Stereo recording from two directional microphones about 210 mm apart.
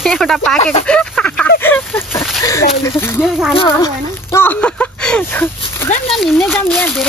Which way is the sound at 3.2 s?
5° right (ahead or behind).